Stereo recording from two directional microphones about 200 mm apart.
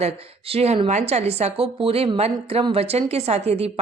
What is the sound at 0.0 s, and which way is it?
Speech, 30° right (ahead or behind).